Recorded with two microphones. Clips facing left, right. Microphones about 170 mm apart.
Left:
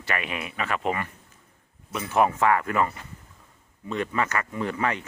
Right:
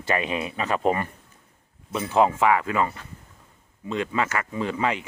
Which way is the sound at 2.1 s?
15° right (ahead or behind).